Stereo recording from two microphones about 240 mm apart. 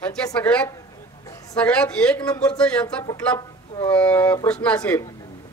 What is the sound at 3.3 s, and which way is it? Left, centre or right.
Speech, centre.